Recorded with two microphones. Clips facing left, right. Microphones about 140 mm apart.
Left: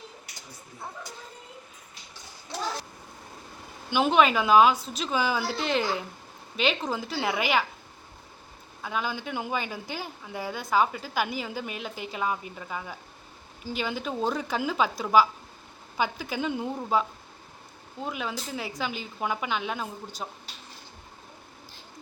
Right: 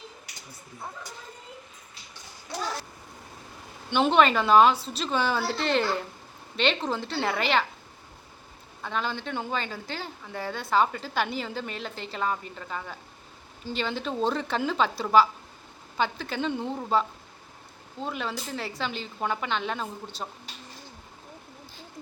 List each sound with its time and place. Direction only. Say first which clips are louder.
3.8 s a woman's voice: right 1 dB; 5° left (ahead or behind)
8.8 s a woman's voice: even; 5° left (ahead or behind)